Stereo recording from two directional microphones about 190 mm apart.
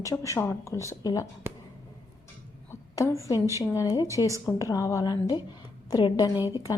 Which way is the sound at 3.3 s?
15° right (ahead or behind).